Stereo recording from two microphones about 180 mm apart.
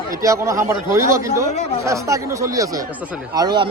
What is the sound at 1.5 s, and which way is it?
Speech, 40° left (ahead or behind).